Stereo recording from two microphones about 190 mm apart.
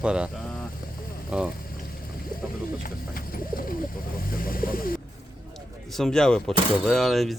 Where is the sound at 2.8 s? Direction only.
50° left (ahead or behind).